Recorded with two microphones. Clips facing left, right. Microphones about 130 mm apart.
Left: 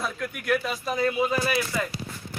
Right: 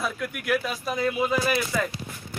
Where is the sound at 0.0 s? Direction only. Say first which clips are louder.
Right 1 dB; 5° right (ahead or behind).